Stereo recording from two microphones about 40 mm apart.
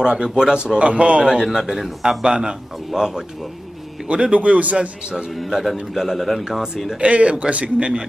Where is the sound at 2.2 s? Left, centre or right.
Centre.